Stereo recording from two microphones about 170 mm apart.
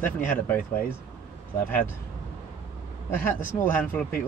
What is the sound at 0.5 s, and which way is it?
Speech, 10° left (ahead or behind).